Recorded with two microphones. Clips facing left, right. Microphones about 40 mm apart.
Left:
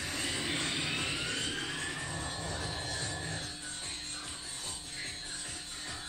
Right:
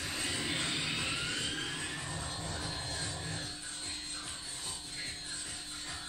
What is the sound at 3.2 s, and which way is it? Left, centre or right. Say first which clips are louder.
Music: left 2 dB; left.